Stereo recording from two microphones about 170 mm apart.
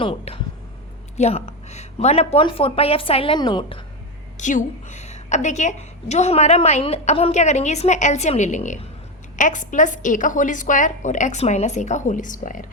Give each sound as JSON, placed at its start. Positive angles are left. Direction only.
{"t": 0.0, "sound": "speech", "side_deg": 30}
{"t": 4.4, "sound": "a woman's voice", "side_deg": 45}